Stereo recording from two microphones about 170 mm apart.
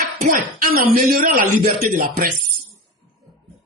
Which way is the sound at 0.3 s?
60° right (ahead or behind).